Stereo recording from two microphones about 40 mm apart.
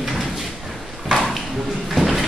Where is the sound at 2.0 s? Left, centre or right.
Centre.